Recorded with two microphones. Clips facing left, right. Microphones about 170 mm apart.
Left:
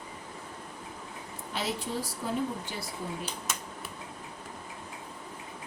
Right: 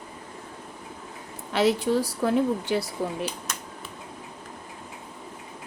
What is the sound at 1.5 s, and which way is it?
A woman's voice, 75° right (ahead or behind).